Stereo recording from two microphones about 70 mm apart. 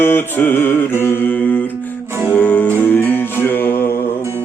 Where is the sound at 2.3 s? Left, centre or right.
Left.